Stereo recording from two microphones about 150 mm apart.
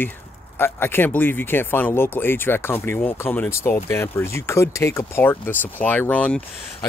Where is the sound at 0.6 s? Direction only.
15° left (ahead or behind).